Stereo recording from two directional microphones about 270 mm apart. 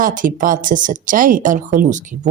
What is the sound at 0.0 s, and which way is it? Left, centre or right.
Speech, right.